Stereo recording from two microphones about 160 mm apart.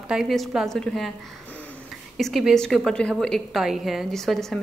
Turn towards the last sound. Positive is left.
turn(degrees=0)  # may be behind; listen again after turning